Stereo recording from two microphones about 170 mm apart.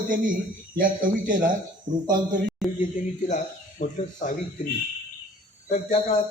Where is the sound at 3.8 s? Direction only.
45° left (ahead or behind).